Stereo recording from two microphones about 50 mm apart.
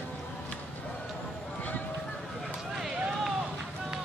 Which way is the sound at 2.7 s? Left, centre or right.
Centre.